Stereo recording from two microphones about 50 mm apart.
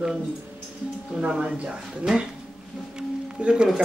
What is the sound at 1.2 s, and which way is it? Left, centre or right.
Speech, centre.